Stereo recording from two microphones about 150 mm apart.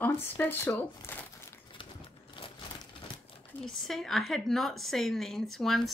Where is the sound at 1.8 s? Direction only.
35° left (ahead or behind).